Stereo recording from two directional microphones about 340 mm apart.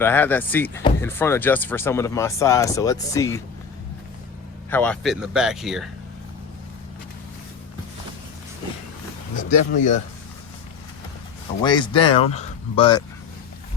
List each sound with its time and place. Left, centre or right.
0.0 s speech: centre
4.7 s speech: centre
9.4 s speech: left
11.6 s speech: centre